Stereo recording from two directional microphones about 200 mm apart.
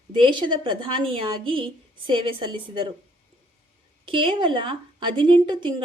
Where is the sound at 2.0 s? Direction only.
25° right (ahead or behind).